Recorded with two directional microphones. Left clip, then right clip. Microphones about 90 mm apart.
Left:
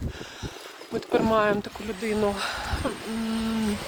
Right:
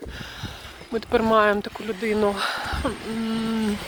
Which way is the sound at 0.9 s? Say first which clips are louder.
Right 3 dB; 40° right (ahead or behind).